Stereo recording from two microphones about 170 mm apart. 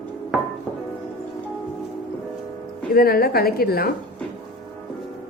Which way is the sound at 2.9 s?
60° left (ahead or behind).